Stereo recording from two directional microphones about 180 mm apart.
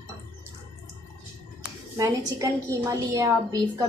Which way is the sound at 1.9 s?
20° right (ahead or behind).